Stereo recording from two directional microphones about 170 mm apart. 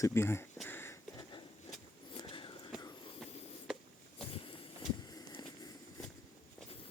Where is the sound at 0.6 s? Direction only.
10° left (ahead or behind).